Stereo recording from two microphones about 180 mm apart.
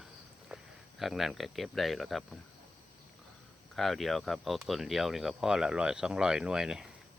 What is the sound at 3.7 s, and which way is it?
Speech, centre (ahead or behind).